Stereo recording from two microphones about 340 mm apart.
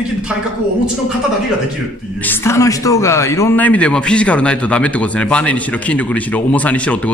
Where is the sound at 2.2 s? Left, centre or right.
Centre.